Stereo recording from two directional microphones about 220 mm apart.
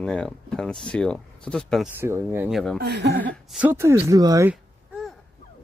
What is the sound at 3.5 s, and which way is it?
Speech, 10° right (ahead or behind).